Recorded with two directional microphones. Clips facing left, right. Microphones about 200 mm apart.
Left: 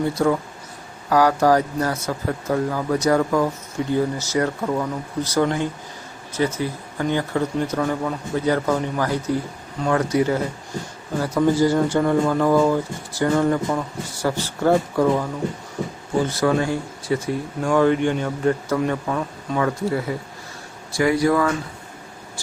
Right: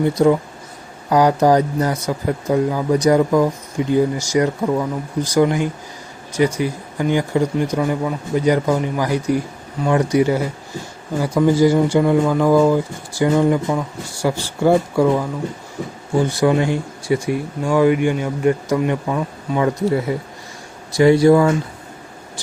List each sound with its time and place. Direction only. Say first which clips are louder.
0.1 s speech: right 5 dB; 15° right (ahead or behind)